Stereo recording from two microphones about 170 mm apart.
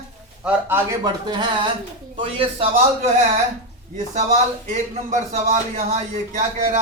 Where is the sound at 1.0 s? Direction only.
25° right (ahead or behind).